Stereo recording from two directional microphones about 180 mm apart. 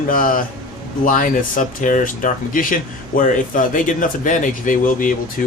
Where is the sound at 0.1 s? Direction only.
50° left (ahead or behind).